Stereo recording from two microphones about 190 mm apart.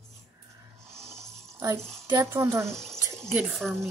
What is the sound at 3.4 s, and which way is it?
Speech, centre (ahead or behind).